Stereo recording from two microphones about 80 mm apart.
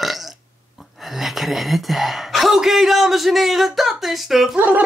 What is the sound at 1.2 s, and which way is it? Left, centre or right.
Speech, centre.